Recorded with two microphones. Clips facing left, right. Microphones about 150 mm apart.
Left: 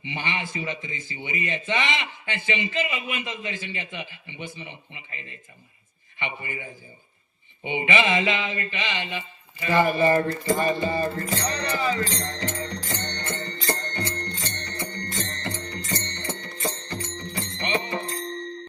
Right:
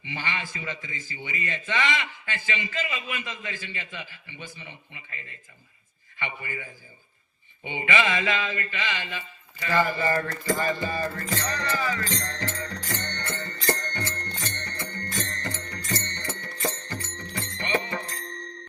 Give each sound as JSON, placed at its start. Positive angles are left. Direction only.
{"t": 0.0, "sound": "a man's voice", "side_deg": 20}
{"t": 10.4, "sound": "music", "side_deg": 20}